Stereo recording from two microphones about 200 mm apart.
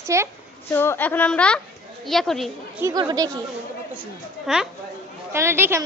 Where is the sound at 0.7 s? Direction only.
10° left (ahead or behind).